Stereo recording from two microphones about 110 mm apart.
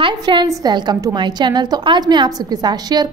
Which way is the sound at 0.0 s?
45° right (ahead or behind).